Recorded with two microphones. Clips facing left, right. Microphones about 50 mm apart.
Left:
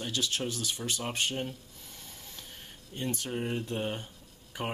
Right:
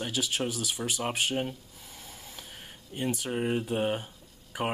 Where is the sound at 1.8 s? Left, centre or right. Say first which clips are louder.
Right 4 dB; centre.